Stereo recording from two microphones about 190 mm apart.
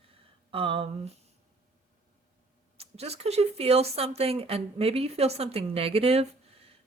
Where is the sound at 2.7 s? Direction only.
30° right (ahead or behind).